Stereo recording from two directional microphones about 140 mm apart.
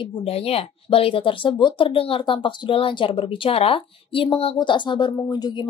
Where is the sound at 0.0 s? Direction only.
45° left (ahead or behind).